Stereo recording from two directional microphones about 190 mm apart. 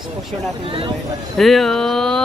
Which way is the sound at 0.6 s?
30° right (ahead or behind).